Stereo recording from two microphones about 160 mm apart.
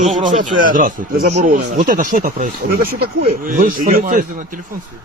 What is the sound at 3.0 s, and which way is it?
Speech, 65° right (ahead or behind).